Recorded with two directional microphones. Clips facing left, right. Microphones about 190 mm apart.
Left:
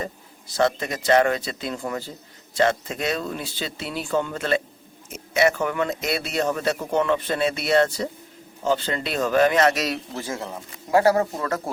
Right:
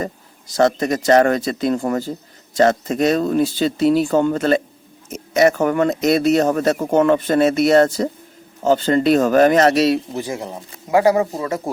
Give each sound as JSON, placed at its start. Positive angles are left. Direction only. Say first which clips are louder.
{"t": 0.0, "sound": "speech", "louder": "right 5 dB", "side_deg": -45}
{"t": 10.1, "sound": "speech", "louder": "right 5 dB", "side_deg": -15}